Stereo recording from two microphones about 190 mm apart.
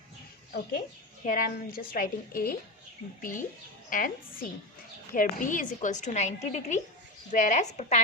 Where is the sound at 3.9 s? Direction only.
45° left (ahead or behind).